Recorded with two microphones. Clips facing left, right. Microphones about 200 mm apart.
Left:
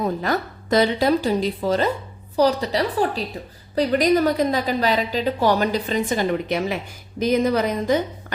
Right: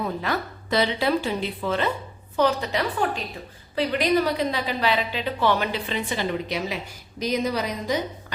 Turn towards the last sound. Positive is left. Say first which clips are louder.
# left 6 dB
turn(degrees=50)  # may be behind; listen again after turning